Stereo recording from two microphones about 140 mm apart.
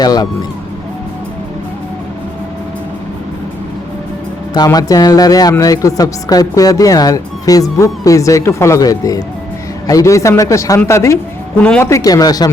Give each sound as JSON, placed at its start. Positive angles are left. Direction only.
{"t": 0.0, "sound": "speech", "side_deg": 30}
{"t": 4.5, "sound": "speech", "side_deg": 30}